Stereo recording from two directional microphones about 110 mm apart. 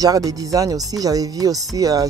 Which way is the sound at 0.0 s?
35° right (ahead or behind).